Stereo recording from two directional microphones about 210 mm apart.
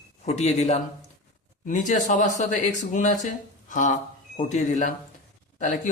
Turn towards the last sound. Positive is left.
turn(degrees=35)  # may be behind; listen again after turning